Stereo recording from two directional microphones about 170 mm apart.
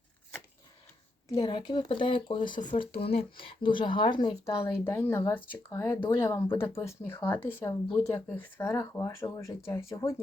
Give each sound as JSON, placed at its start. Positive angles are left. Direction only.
{"t": 1.4, "sound": "speech", "side_deg": 25}
{"t": 4.9, "sound": "speech", "side_deg": 15}